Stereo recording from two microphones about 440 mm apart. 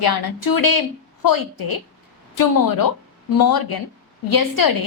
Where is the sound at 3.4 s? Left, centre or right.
Left.